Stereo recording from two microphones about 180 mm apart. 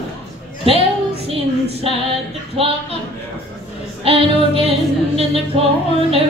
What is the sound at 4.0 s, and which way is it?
Music, 30° right (ahead or behind).